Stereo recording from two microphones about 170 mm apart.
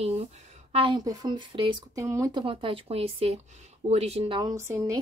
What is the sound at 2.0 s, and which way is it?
Speech, 20° right (ahead or behind).